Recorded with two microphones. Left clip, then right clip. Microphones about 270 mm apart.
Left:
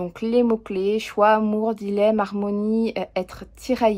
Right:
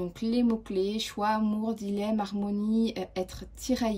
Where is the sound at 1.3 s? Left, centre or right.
Left.